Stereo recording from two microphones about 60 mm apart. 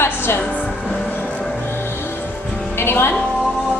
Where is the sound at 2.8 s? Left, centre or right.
Left.